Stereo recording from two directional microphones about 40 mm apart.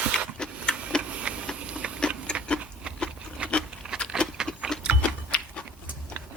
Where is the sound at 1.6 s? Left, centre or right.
Right.